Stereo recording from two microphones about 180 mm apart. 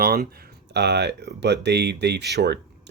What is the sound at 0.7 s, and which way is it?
Speech, 70° right (ahead or behind).